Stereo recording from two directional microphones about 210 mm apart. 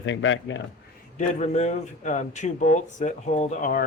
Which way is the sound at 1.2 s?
35° left (ahead or behind).